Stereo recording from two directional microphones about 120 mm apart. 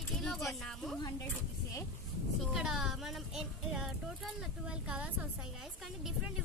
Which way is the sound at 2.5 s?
5° right (ahead or behind).